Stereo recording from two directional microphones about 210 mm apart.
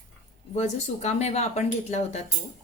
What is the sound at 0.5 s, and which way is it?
A woman's voice, 30° left (ahead or behind).